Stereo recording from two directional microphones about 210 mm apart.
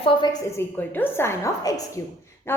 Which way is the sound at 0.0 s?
20° left (ahead or behind).